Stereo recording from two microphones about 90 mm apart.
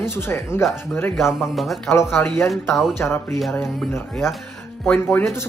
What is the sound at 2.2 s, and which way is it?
Speech, 15° left (ahead or behind).